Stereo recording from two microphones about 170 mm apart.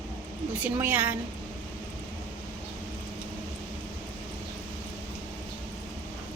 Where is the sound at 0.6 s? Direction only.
10° right (ahead or behind).